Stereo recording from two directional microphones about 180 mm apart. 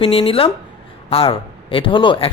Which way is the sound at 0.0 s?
30° left (ahead or behind).